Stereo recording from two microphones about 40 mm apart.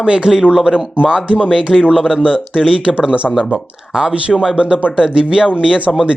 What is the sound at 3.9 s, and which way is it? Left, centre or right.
Speech, centre.